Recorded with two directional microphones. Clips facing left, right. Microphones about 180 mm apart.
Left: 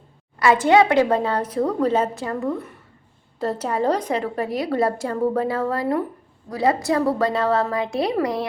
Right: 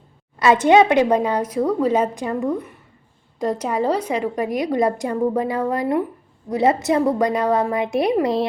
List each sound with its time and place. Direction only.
0.3 s a woman's voice: 20° right (ahead or behind)